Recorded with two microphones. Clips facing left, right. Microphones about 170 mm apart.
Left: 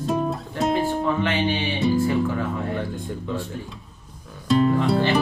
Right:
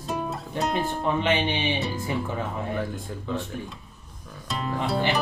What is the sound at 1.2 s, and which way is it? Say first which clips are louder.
Speech: left 2 dB; 20° right (ahead or behind).